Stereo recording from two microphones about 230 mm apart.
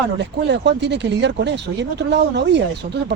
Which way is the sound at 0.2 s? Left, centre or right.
Right.